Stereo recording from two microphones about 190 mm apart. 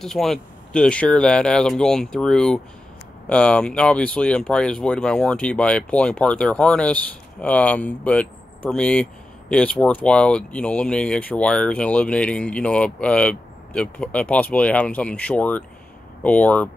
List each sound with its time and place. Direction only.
0.0 s speech: centre (ahead or behind)